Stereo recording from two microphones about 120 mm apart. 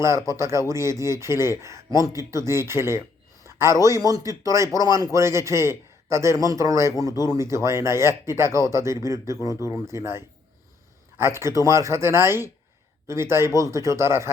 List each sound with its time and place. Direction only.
0.0 s a man's voice: 25° right (ahead or behind)